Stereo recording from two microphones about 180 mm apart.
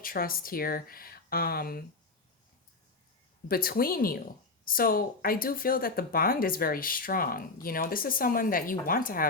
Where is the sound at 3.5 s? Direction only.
55° left (ahead or behind).